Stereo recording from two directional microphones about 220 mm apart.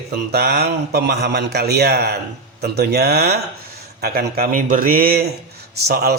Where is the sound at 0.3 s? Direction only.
45° right (ahead or behind).